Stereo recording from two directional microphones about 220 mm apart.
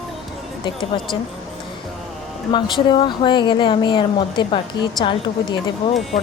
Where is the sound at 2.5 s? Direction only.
20° left (ahead or behind).